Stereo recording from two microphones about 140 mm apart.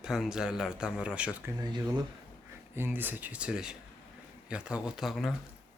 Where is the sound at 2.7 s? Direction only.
15° right (ahead or behind).